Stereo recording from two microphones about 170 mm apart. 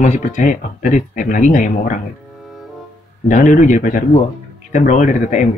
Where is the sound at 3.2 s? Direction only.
45° left (ahead or behind).